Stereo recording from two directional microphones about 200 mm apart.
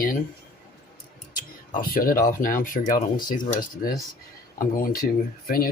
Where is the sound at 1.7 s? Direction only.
45° left (ahead or behind).